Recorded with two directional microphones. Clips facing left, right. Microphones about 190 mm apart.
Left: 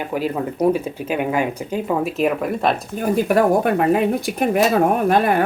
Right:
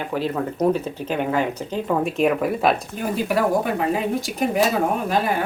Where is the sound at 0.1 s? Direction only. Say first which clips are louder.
Left 1 dB; 10° left (ahead or behind).